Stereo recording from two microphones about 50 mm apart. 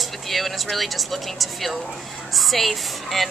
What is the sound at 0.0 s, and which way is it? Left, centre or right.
Speech, centre.